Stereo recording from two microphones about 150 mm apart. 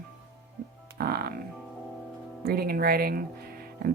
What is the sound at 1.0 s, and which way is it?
Speech, 90° right.